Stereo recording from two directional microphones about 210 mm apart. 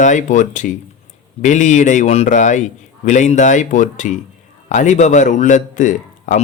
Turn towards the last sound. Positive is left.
turn(degrees=35)  # may be behind; listen again after turning